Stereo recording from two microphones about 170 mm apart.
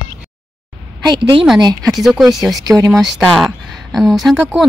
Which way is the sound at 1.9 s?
Centre (ahead or behind).